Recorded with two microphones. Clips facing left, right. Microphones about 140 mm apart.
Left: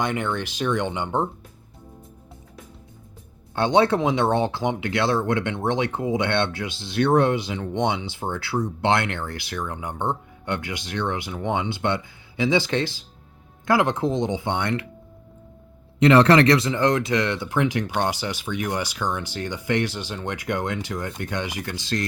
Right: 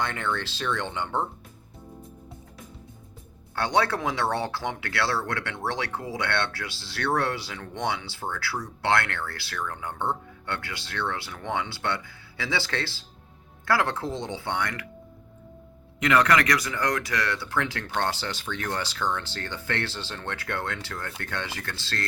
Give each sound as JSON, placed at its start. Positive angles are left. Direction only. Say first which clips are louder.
{"t": 0.0, "sound": "speech", "louder": "left 4 dB", "side_deg": 15}
{"t": 3.5, "sound": "speech", "louder": "left 6 dB", "side_deg": 20}
{"t": 16.0, "sound": "speech", "louder": "left 7 dB", "side_deg": 30}